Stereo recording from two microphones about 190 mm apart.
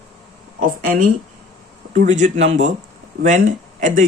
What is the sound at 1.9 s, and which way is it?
Speech, 40° right (ahead or behind).